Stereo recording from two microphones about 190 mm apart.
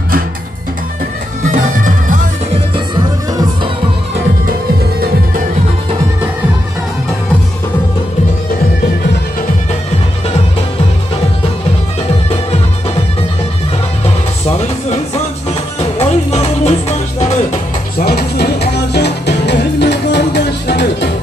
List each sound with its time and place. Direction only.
1.4 s music: 40° right (ahead or behind)
15.8 s music: 30° left (ahead or behind)
17.9 s music: 55° left (ahead or behind)